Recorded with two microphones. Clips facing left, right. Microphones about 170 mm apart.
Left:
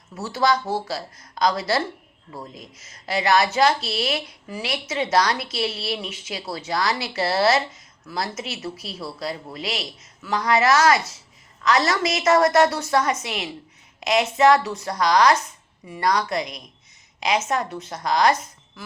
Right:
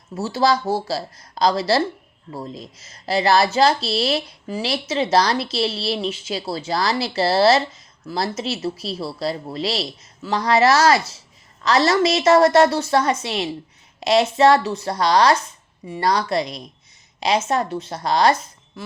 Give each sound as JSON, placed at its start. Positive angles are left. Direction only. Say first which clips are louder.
{"t": 0.1, "sound": "a woman's voice", "louder": "right 3 dB", "side_deg": -30}